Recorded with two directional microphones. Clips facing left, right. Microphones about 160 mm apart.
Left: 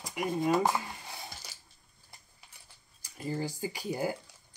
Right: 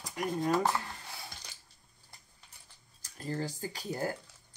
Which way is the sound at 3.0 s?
10° left (ahead or behind).